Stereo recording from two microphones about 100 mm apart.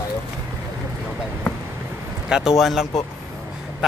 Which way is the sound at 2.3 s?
5° right (ahead or behind).